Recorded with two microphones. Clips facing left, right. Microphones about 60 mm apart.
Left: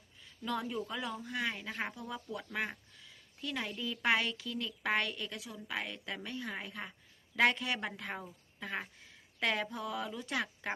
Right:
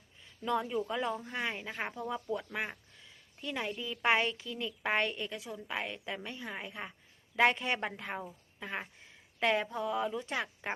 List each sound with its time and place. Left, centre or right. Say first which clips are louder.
0.4 s speech: right 4 dB; centre
0.9 s a woman's voice: right 3 dB; right
2.5 s a sound: even; right
4.0 s a woman's voice: right 3 dB; right
8.1 s a woman's voice: right 3 dB; centre